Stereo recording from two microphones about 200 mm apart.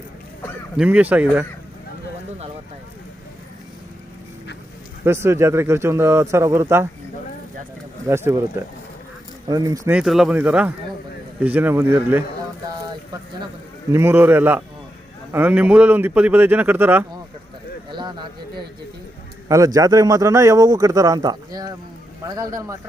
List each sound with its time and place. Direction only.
0.8 s a man's voice: 10° right (ahead or behind)
5.0 s a man's voice: 15° right (ahead or behind)
8.0 s a man's voice: 10° right (ahead or behind)
9.5 s a man's voice: 15° right (ahead or behind)
9.9 s a man's voice: centre (ahead or behind)
13.9 s a man's voice: 10° right (ahead or behind)
17.9 s a sound: 20° right (ahead or behind)
19.5 s a man's voice: 15° right (ahead or behind)